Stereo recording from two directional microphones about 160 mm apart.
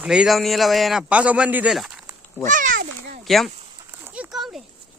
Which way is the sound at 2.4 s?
55° right (ahead or behind).